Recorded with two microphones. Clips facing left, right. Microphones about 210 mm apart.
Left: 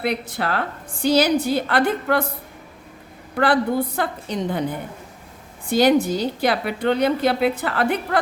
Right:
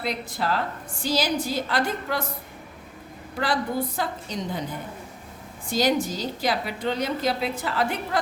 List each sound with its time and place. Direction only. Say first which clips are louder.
0.0 s a woman's voice: left 4 dB; 65° left (ahead or behind)
3.3 s a woman's voice: left 7 dB; 60° left (ahead or behind)
5.6 s a woman's voice: left 7 dB; 60° left (ahead or behind)